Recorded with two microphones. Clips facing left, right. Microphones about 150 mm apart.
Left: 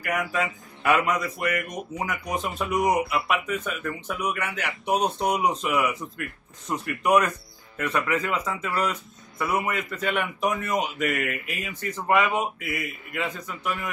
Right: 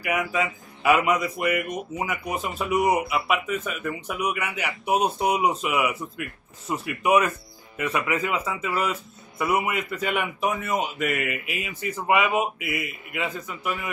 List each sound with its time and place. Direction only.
0.0 s speech: 5° right (ahead or behind)
2.8 s speech: 55° right (ahead or behind)
3.1 s a man's voice: 5° right (ahead or behind)